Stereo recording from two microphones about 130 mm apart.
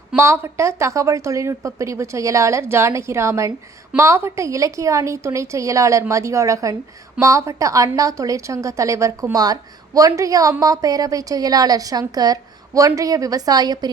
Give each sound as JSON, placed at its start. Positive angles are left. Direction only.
{"t": 0.2, "sound": "a woman's voice", "side_deg": -20}